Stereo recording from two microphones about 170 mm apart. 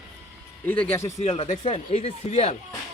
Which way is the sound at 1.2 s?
40° left (ahead or behind).